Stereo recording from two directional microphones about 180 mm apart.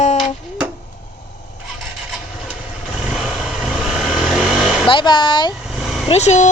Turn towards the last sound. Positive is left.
turn(degrees=40)  # may be behind; listen again after turning